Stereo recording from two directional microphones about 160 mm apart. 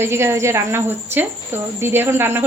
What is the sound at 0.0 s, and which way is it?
Speech, 15° right (ahead or behind).